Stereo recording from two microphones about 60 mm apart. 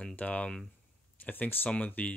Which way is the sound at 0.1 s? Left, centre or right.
Left.